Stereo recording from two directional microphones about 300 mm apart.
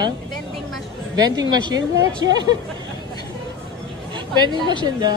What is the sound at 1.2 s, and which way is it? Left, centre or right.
Speech, centre.